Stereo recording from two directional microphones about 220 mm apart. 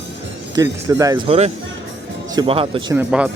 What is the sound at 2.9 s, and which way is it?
Speech, 5° right (ahead or behind).